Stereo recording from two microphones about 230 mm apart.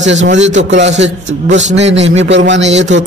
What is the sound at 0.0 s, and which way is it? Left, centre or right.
A man's voice, right.